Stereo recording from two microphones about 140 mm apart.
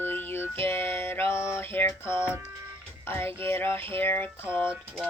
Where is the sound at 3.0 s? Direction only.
15° left (ahead or behind).